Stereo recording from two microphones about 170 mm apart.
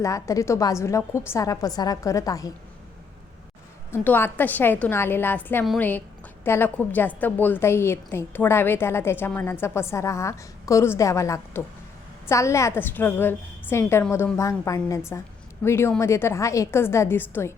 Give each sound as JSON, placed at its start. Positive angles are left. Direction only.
{"t": 0.0, "sound": "a woman's voice", "side_deg": 20}
{"t": 3.9, "sound": "a woman's voice", "side_deg": 10}